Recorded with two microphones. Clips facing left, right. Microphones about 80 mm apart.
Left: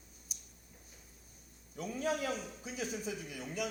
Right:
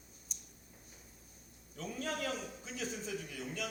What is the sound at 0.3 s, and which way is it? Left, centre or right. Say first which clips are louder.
Tick-tock: even; centre.